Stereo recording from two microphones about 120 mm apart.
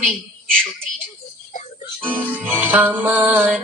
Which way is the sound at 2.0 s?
15° right (ahead or behind).